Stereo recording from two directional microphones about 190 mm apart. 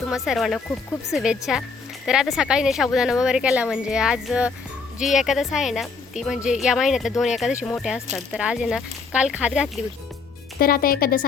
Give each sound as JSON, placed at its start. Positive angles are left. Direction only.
{"t": 0.0, "sound": "speech", "side_deg": 0}
{"t": 10.6, "sound": "speech", "side_deg": 50}